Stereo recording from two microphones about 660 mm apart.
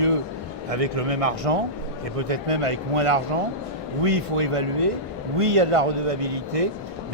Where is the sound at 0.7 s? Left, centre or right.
Right.